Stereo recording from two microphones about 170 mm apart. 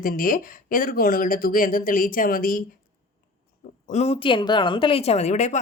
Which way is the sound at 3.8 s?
40° left (ahead or behind).